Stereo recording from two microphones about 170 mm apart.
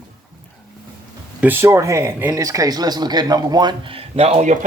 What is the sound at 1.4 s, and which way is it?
Speech, 15° right (ahead or behind).